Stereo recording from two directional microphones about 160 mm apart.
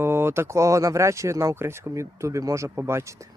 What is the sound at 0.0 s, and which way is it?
Speech, 15° right (ahead or behind).